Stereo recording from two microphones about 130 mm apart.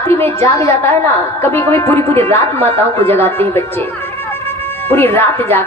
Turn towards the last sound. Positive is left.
turn(degrees=15)  # may be behind; listen again after turning